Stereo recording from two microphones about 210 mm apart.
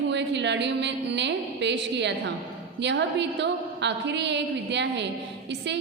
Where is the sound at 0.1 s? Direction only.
55° right (ahead or behind).